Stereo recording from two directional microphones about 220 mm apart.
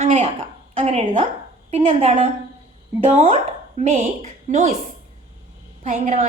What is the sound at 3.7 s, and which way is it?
Speech, 30° right (ahead or behind).